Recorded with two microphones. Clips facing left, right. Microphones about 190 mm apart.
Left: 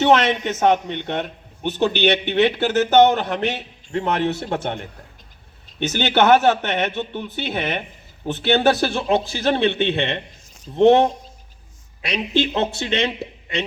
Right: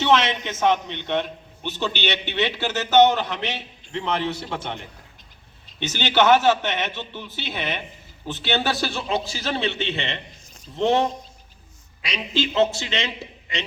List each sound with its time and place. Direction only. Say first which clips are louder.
0.0 s a man's voice: left 4 dB; 50° left (ahead or behind)
5.9 s a man's voice: left 2 dB; 55° left (ahead or behind)